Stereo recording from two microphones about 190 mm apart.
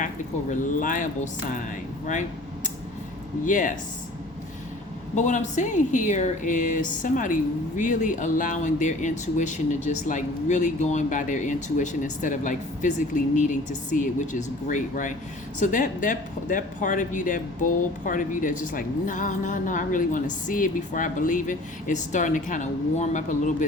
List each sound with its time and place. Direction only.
0.6 s speech: 45° left (ahead or behind)
3.4 s speech: 40° left (ahead or behind)
5.1 s speech: 40° left (ahead or behind)